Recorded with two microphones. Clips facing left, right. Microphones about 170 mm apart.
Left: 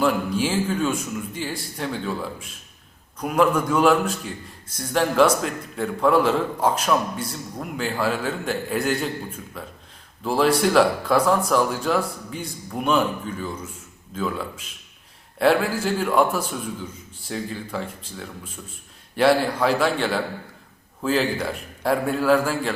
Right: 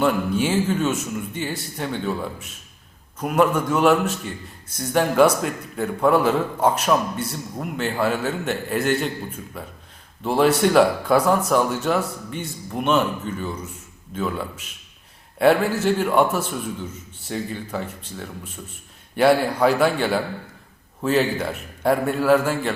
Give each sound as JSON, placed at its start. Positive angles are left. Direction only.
{"t": 0.0, "sound": "speech", "side_deg": 0}
{"t": 3.2, "sound": "a man's voice", "side_deg": -5}
{"t": 15.8, "sound": "speech", "side_deg": -5}